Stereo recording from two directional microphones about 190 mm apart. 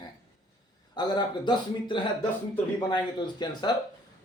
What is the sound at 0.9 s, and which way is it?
Speech, 25° left (ahead or behind).